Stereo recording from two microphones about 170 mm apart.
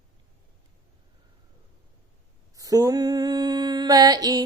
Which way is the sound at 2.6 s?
20° right (ahead or behind).